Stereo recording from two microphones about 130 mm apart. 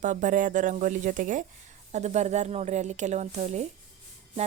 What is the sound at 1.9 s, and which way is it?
Music, 60° right (ahead or behind).